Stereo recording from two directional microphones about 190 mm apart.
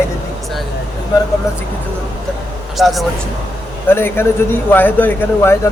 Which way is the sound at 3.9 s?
10° left (ahead or behind).